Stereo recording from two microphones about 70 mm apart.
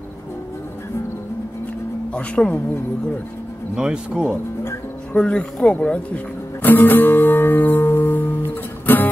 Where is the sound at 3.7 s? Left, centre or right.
Centre.